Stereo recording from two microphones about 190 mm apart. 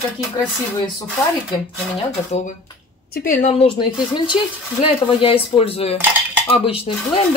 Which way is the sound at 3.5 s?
25° left (ahead or behind).